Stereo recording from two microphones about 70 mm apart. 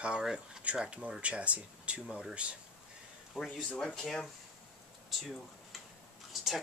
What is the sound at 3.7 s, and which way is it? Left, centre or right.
Speech, centre.